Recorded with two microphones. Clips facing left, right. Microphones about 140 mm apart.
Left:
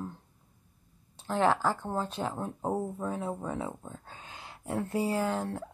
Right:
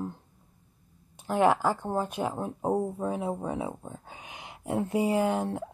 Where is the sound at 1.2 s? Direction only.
15° right (ahead or behind).